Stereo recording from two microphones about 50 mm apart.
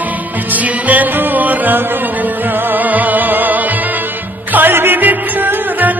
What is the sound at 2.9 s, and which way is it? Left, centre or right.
Music, right.